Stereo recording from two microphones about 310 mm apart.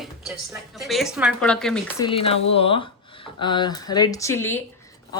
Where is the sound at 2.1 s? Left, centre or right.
Centre.